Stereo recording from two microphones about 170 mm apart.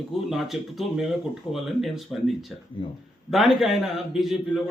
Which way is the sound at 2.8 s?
30° left (ahead or behind).